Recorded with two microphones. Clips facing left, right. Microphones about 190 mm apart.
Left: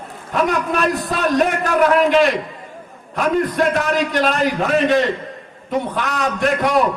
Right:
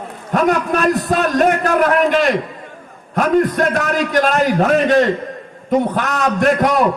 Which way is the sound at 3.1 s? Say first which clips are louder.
Right 3 dB; 45° right (ahead or behind).